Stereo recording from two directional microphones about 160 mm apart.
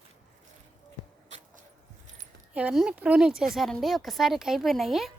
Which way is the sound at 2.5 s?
5° right (ahead or behind).